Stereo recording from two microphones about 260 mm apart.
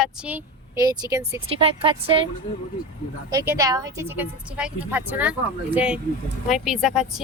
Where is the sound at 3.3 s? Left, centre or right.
Centre.